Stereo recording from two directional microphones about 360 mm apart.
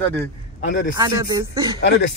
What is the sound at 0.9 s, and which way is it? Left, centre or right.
Speech, centre.